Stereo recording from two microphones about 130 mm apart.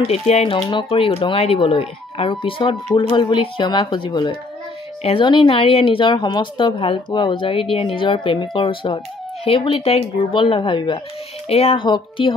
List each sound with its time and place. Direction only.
0.0 s speech: 50° left (ahead or behind)